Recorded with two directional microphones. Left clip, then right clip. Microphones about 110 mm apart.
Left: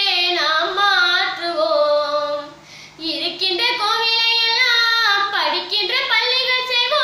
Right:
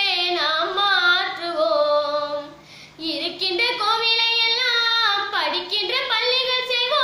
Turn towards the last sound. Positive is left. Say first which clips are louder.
# left 3 dB
turn(degrees=-15)  # may be behind; listen again after turning